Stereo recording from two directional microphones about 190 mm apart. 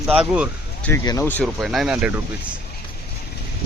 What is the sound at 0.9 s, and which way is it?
Speech, 15° left (ahead or behind).